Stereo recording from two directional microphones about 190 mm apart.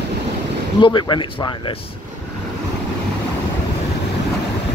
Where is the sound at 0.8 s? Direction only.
25° left (ahead or behind).